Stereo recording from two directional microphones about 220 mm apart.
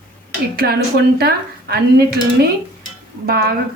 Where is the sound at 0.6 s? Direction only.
45° right (ahead or behind).